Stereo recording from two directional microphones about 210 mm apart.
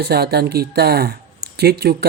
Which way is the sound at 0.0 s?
50° right (ahead or behind).